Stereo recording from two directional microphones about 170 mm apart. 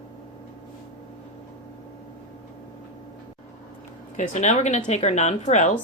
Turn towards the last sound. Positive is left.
turn(degrees=45)  # may be behind; listen again after turning